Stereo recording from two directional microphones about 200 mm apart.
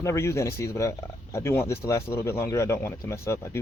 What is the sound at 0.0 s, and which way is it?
Speech, 15° left (ahead or behind).